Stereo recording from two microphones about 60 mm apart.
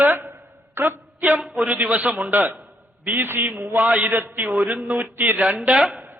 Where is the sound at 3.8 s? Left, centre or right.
Right.